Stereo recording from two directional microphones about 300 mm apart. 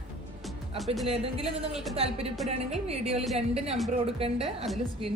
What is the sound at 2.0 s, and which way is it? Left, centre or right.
Speech, centre.